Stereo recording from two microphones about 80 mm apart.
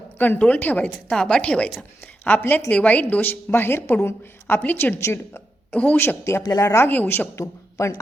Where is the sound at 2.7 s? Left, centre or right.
Centre.